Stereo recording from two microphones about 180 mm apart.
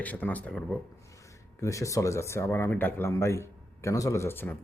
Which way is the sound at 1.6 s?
15° left (ahead or behind).